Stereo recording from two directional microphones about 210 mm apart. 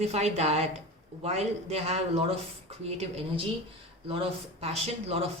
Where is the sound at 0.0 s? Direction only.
30° right (ahead or behind).